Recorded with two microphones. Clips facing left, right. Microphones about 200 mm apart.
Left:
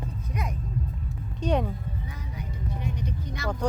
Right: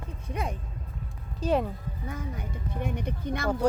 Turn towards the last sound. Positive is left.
turn(degrees=-55)  # may be behind; listen again after turning